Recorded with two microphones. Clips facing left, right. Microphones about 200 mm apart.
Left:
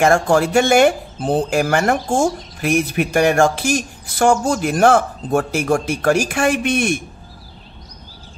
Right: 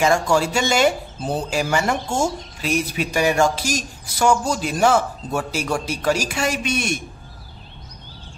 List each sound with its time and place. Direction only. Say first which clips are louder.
0.0 s speech: left 4 dB; 55° left (ahead or behind)